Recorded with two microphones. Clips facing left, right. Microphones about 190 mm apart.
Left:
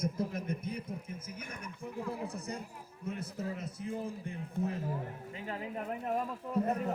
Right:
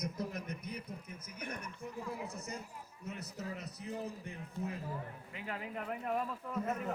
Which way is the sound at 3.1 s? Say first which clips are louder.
Left 6 dB; 55° left (ahead or behind).